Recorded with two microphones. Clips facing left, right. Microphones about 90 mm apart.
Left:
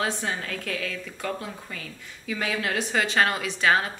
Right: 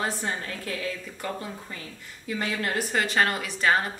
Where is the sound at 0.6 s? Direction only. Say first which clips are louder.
Even; 65° left (ahead or behind).